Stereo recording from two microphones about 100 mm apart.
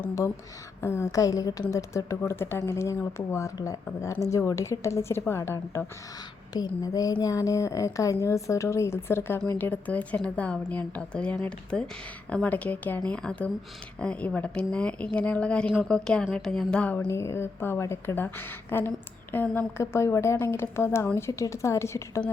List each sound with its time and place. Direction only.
0.8 s a woman's voice: 25° left (ahead or behind)
6.5 s a woman's voice: 40° left (ahead or behind); by 17.1 s 10° left (ahead or behind)
17.1 s speech: 30° left (ahead or behind)